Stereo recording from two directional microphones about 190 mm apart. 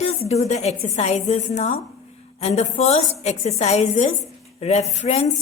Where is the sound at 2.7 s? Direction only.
35° left (ahead or behind).